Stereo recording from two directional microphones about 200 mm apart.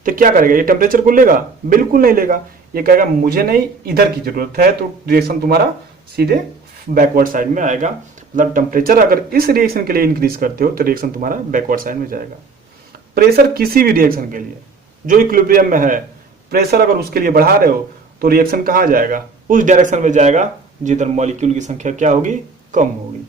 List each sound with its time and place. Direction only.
0.0 s speech: 45° right (ahead or behind)
6.9 s speech: 45° right (ahead or behind)